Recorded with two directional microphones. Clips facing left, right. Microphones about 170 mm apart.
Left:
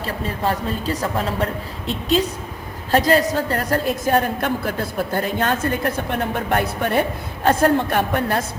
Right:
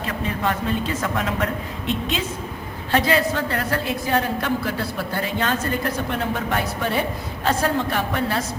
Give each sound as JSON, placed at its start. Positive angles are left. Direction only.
{"t": 0.0, "sound": "a woman's voice", "side_deg": 35}